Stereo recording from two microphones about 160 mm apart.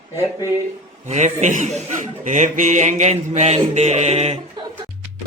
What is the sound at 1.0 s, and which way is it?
Mantra, 45° right (ahead or behind).